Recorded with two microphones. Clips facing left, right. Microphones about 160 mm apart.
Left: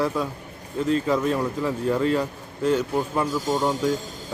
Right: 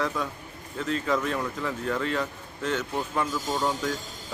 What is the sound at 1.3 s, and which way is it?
Speech, 10° left (ahead or behind).